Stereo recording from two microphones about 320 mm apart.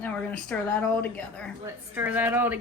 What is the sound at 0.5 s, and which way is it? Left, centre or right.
Speech, centre.